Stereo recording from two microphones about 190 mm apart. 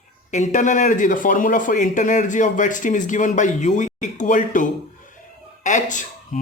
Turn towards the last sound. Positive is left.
turn(degrees=40)  # may be behind; listen again after turning